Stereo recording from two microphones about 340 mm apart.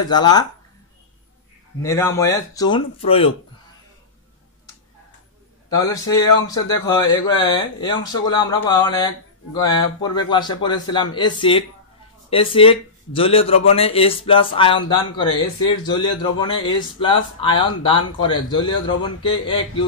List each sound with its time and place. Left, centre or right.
0.0 s speech: centre
1.8 s speech: centre
5.7 s speech: centre